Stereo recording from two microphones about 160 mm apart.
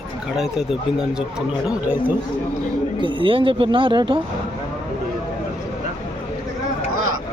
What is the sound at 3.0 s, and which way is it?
Speech, 30° right (ahead or behind).